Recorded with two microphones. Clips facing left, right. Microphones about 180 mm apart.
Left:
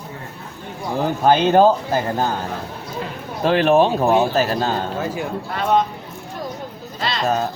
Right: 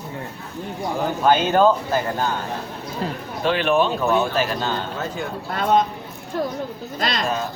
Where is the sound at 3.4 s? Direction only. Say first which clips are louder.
Left 4 dB; 40° left (ahead or behind).